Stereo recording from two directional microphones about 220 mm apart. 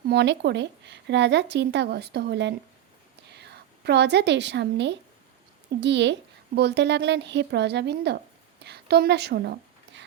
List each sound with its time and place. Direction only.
0.1 s a woman's voice: 50° right (ahead or behind)